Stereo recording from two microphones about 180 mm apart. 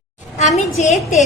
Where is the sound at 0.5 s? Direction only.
40° left (ahead or behind).